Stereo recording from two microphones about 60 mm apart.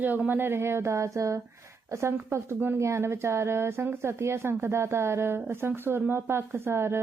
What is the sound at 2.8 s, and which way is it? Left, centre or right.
A woman's voice, right.